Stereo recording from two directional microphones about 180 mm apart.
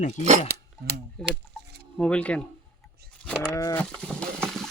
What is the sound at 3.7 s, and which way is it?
Speech, 5° left (ahead or behind).